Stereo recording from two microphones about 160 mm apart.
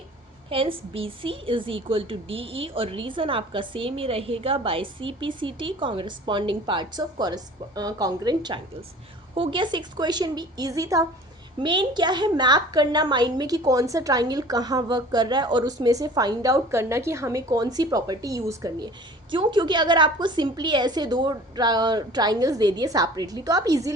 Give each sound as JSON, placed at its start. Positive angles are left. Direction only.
{"t": 0.5, "sound": "a woman's voice", "side_deg": -35}